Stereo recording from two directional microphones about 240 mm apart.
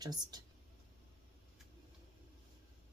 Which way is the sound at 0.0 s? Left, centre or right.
Centre.